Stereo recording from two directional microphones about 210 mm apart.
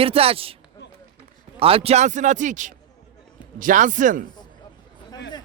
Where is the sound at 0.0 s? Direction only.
25° right (ahead or behind).